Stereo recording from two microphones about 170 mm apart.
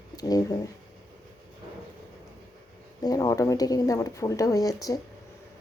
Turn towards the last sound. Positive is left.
turn(degrees=20)  # may be behind; listen again after turning